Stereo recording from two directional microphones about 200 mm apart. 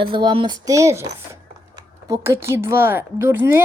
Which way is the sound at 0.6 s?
15° right (ahead or behind).